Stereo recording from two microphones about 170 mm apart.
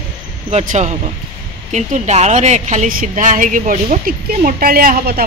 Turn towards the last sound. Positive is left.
turn(degrees=-60)  # may be behind; listen again after turning